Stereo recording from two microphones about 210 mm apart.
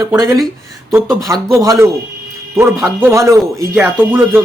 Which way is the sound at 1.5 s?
15° right (ahead or behind).